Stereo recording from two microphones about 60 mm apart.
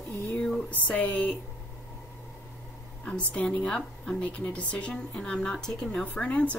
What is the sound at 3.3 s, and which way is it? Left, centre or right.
Speech, centre.